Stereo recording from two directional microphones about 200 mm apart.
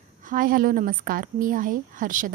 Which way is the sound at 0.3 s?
45° right (ahead or behind).